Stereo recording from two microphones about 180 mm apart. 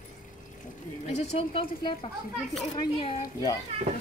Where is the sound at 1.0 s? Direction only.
35° left (ahead or behind).